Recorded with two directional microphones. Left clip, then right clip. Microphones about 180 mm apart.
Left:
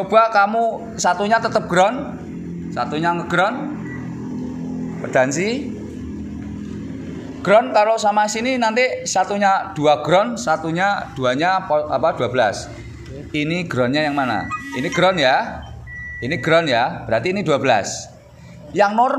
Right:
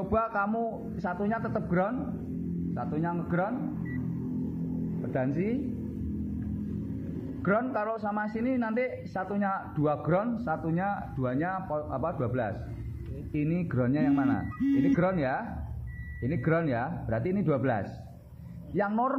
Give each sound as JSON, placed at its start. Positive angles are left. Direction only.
{"t": 0.5, "sound": "a man's voice", "side_deg": 10}
{"t": 5.1, "sound": "a man's voice", "side_deg": 15}
{"t": 7.4, "sound": "a man's voice", "side_deg": 15}